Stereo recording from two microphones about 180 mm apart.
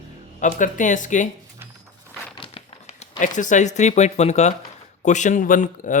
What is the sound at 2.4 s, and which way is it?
Speech, 35° left (ahead or behind).